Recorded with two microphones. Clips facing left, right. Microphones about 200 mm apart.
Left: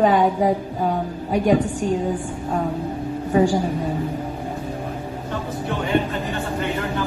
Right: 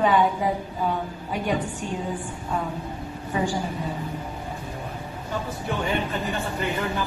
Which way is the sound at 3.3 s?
40° left (ahead or behind).